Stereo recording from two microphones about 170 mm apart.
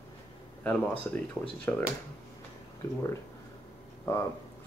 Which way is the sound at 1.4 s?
10° right (ahead or behind).